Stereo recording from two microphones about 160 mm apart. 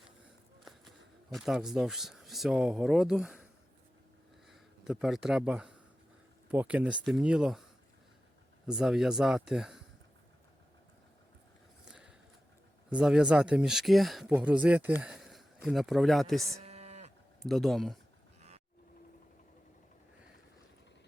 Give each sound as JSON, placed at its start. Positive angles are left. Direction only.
{"t": 0.6, "sound": "speech", "side_deg": 0}
{"t": 4.4, "sound": "speech", "side_deg": 0}
{"t": 8.6, "sound": "speech", "side_deg": -5}
{"t": 11.9, "sound": "a sound", "side_deg": -5}
{"t": 12.9, "sound": "speech", "side_deg": -5}
{"t": 16.6, "sound": "moo", "side_deg": -40}
{"t": 17.4, "sound": "speech", "side_deg": 0}
{"t": 18.3, "sound": "a sound", "side_deg": -40}